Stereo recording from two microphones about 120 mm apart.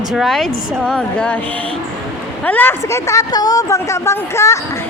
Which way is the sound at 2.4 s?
15° left (ahead or behind).